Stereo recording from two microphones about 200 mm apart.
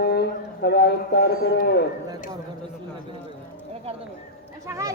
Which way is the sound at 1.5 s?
60° left (ahead or behind).